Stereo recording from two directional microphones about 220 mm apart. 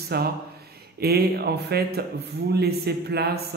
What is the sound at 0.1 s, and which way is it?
A man's voice, 45° right (ahead or behind).